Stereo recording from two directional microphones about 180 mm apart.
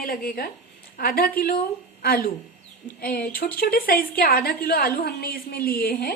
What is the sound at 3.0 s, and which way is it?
A woman's voice, 55° left (ahead or behind).